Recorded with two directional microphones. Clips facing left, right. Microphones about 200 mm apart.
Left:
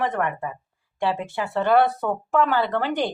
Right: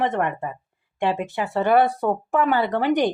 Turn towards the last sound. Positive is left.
turn(degrees=-15)  # may be behind; listen again after turning